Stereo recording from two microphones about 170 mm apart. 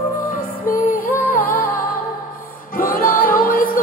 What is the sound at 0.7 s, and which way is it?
Music, 55° left (ahead or behind).